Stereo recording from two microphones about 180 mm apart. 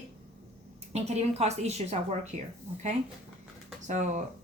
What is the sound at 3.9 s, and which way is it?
Speech, 40° right (ahead or behind).